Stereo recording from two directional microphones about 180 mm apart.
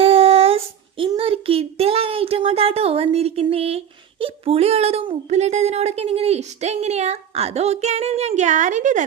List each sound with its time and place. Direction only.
0.0 s child singing: 35° right (ahead or behind)